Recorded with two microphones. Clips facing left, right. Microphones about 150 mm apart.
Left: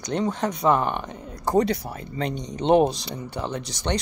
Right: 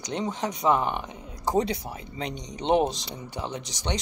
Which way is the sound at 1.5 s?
65° left (ahead or behind).